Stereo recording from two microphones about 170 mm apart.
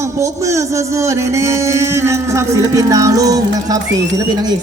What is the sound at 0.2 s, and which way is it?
Speech, 15° right (ahead or behind).